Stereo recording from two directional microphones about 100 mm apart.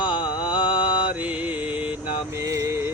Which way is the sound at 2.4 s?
30° right (ahead or behind).